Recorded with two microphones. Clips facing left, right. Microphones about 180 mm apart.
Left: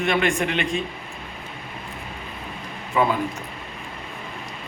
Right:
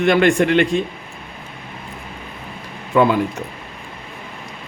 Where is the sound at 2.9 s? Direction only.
70° right (ahead or behind).